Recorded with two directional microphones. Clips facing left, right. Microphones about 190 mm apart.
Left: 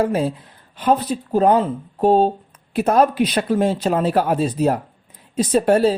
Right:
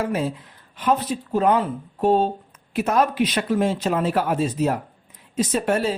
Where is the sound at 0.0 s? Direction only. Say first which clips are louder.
Left 5 dB; 30° left (ahead or behind).